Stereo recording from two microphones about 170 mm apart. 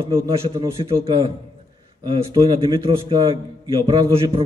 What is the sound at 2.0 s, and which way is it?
A man's voice, 25° right (ahead or behind).